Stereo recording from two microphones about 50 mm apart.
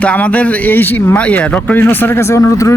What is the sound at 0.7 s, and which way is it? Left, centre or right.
Speech, left.